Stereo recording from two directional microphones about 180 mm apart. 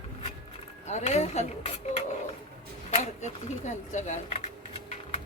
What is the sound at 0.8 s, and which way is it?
Speech, 40° left (ahead or behind).